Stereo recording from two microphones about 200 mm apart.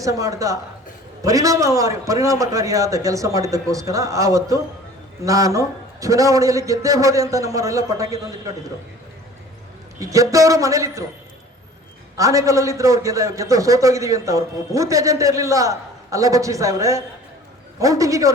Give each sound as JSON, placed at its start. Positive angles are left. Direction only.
{"t": 0.0, "sound": "a man's voice", "side_deg": -15}
{"t": 10.0, "sound": "a man's voice", "side_deg": -15}
{"t": 12.1, "sound": "a man's voice", "side_deg": -15}